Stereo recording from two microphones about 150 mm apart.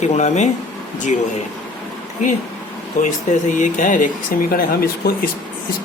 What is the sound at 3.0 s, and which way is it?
Speech, 55° left (ahead or behind).